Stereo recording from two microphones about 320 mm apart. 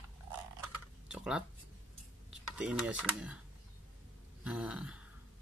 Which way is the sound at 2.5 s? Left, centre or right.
Centre.